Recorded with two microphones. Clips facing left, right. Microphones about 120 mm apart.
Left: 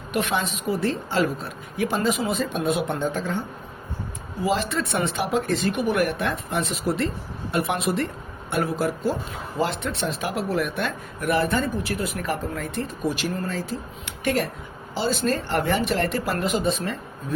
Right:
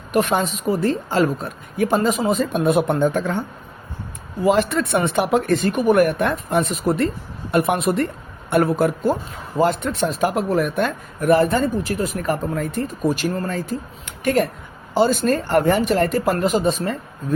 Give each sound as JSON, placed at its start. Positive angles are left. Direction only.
{"t": 0.1, "sound": "a man's voice", "side_deg": -45}
{"t": 2.5, "sound": "speech", "side_deg": -55}
{"t": 4.4, "sound": "a man's voice", "side_deg": -55}